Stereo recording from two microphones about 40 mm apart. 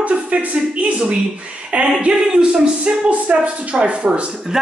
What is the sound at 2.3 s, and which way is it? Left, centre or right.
A woman's voice, right.